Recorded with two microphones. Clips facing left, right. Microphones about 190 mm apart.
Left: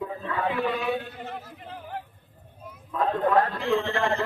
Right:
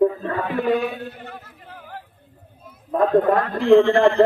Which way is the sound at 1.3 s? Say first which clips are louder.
Left 2 dB; 25° left (ahead or behind).